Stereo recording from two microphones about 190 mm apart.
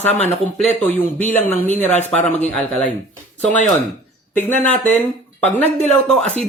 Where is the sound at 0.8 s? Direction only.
10° left (ahead or behind).